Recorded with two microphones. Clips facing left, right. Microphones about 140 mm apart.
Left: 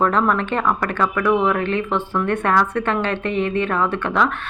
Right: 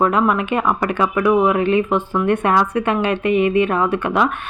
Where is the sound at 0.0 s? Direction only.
10° right (ahead or behind).